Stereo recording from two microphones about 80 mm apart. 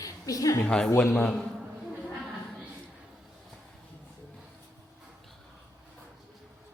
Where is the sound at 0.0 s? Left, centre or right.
Left.